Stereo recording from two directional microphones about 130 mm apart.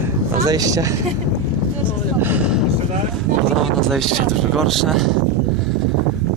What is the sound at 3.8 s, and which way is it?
Speech, 5° left (ahead or behind).